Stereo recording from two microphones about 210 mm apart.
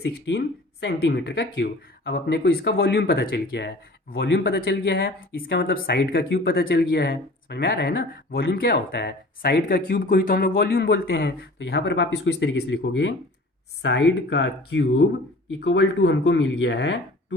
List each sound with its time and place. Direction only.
0.0 s speech: 55° left (ahead or behind)